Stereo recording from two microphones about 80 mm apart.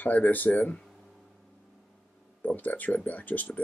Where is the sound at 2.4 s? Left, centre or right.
Left.